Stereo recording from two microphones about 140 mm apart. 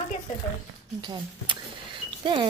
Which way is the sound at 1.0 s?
35° right (ahead or behind).